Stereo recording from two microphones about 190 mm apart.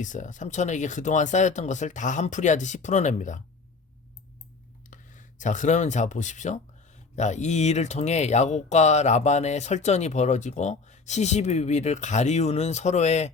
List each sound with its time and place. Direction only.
0.0 s speech: 40° left (ahead or behind)
4.9 s speech: 40° left (ahead or behind)